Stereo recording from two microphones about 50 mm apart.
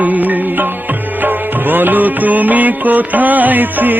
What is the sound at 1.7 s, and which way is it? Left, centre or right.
Music, right.